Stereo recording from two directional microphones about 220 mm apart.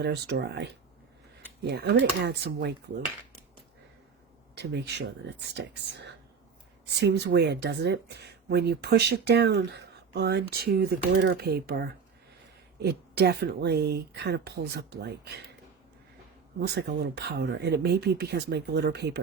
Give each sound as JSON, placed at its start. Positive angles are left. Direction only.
{"t": 0.0, "sound": "speech", "side_deg": -50}
{"t": 4.5, "sound": "speech", "side_deg": -50}
{"t": 16.6, "sound": "speech", "side_deg": -50}